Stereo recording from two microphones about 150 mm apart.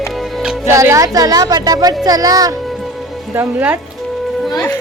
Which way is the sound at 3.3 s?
15° right (ahead or behind).